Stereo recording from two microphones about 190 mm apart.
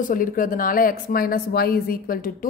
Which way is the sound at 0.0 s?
45° left (ahead or behind).